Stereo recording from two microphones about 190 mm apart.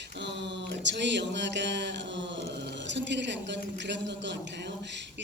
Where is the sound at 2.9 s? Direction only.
65° right (ahead or behind).